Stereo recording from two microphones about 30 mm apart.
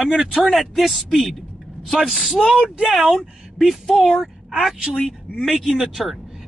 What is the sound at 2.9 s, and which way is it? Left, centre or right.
Speech, centre.